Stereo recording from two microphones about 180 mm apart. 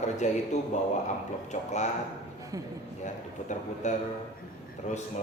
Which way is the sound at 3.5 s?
40° left (ahead or behind).